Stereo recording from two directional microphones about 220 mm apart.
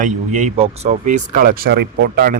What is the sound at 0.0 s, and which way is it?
Speech, 35° right (ahead or behind).